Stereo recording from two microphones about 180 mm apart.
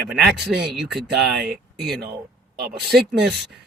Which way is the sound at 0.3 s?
70° right (ahead or behind).